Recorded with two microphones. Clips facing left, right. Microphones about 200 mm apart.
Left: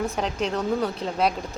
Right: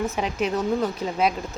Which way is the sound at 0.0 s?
5° right (ahead or behind).